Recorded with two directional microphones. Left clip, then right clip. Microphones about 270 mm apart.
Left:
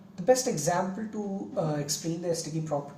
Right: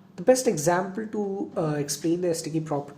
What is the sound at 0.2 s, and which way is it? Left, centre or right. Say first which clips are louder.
Speech: right 3 dB; right.